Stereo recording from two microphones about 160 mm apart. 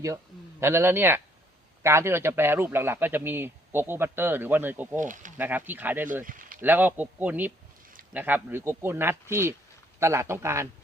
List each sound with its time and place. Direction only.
0.6 s speech: 15° right (ahead or behind)
4.9 s speech: 55° right (ahead or behind)
5.4 s speech: 10° right (ahead or behind)
6.2 s a sound: 60° right (ahead or behind)
6.6 s speech: 10° right (ahead or behind)